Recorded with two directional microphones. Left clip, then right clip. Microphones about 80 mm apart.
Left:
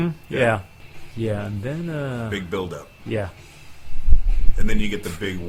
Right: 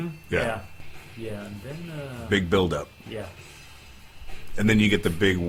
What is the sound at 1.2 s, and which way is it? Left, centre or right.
Speech, left.